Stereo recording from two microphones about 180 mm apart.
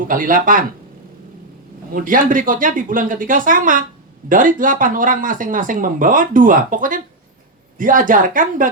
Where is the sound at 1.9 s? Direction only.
50° right (ahead or behind).